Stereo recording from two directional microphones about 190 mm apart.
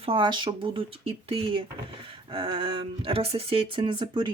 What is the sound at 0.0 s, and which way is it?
Speech, 25° right (ahead or behind).